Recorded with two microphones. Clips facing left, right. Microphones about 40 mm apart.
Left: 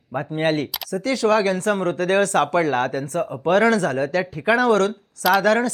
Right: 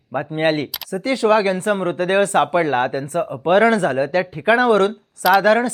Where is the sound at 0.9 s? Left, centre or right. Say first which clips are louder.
Right 3 dB; right.